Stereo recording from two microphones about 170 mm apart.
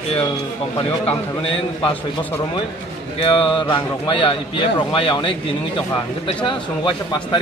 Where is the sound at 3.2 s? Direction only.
30° left (ahead or behind).